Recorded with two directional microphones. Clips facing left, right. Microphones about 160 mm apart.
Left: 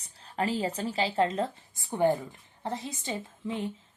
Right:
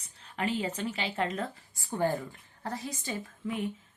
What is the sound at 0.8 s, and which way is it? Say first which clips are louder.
Speech: left 5 dB; 35° left (ahead or behind).